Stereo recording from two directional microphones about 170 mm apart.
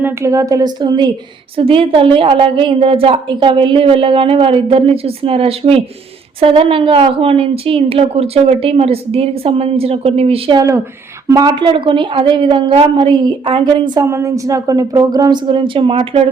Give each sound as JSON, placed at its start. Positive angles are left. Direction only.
{"t": 0.0, "sound": "a woman's voice", "side_deg": -15}
{"t": 11.3, "sound": "a woman's voice", "side_deg": -20}